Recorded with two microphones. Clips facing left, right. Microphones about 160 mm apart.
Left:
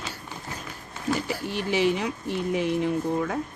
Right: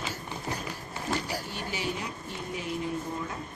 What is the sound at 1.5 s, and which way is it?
Speech, 85° left.